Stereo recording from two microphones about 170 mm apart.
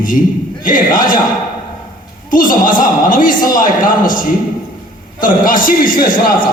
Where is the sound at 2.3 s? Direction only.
55° left (ahead or behind).